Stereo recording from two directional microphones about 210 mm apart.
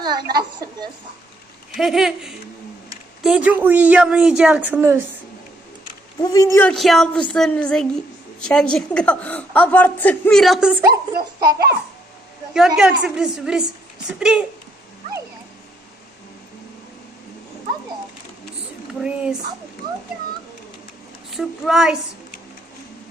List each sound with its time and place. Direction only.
0.0 s a woman's voice: 20° right (ahead or behind)
1.7 s a woman's voice: centre (ahead or behind)
6.2 s a woman's voice: 15° left (ahead or behind); by 10.8 s 5° right (ahead or behind)
10.9 s a woman's voice: 20° right (ahead or behind)
12.5 s a woman's voice: 5° right (ahead or behind)
18.9 s a woman's voice: 5° right (ahead or behind)
21.3 s a woman's voice: centre (ahead or behind)